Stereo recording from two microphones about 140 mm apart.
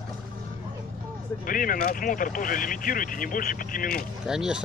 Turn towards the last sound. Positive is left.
turn(degrees=-5)  # may be behind; listen again after turning